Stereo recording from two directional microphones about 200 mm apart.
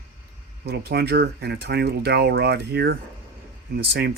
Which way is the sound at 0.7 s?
55° right (ahead or behind).